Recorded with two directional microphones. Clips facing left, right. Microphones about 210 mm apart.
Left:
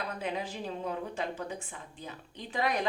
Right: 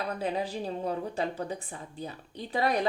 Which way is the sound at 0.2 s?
35° right (ahead or behind).